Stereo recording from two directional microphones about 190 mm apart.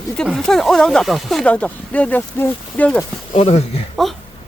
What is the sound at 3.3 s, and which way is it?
Speech, 35° left (ahead or behind).